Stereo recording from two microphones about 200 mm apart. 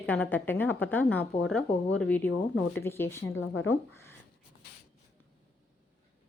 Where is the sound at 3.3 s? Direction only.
75° left (ahead or behind).